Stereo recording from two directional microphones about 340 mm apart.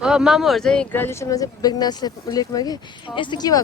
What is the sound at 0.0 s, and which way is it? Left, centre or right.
Speech, centre.